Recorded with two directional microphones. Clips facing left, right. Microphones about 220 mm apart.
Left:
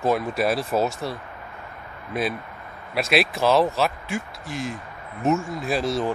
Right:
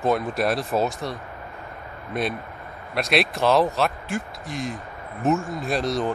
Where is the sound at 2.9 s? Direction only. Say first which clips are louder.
Left 1 dB; centre (ahead or behind).